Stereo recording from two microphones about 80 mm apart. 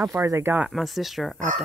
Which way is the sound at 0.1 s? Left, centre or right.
Right.